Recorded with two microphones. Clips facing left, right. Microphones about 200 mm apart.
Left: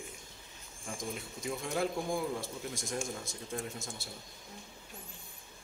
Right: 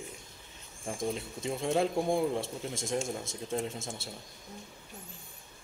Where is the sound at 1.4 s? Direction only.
25° right (ahead or behind).